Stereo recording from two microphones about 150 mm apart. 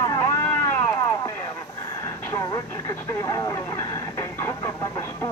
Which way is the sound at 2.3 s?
20° left (ahead or behind).